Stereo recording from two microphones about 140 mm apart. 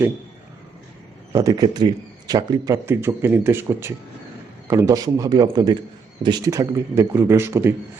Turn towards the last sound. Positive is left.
turn(degrees=-15)  # may be behind; listen again after turning